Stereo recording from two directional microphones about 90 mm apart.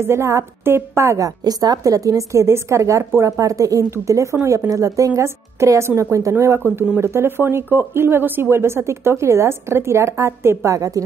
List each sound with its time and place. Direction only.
0.0 s a woman's voice: 30° right (ahead or behind)